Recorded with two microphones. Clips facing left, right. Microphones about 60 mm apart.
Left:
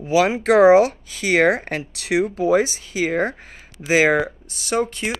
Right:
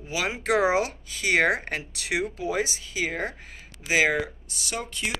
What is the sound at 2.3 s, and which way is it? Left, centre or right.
Speech, left.